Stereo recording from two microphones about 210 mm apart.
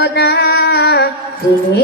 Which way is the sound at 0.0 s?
50° left (ahead or behind).